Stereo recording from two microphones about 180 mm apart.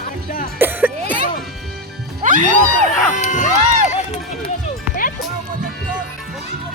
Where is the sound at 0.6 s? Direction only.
10° right (ahead or behind).